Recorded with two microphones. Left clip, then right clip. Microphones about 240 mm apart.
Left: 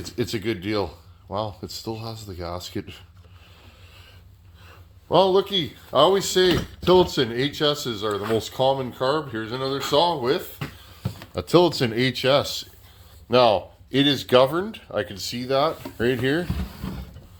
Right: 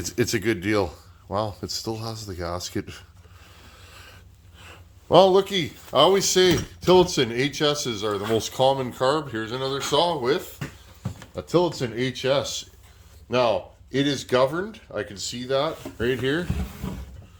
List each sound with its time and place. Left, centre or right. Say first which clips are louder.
0.0 s speech: right 3 dB; centre
5.0 s speech: right 2 dB; right
9.4 s speech: left 1 dB; centre
11.3 s speech: left 4 dB; left; by 16.5 s centre